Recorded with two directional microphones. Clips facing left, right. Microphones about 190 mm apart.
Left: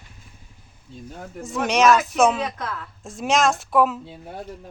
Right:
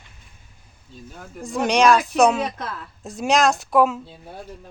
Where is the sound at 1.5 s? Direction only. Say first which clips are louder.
Right 1 dB; 5° left (ahead or behind).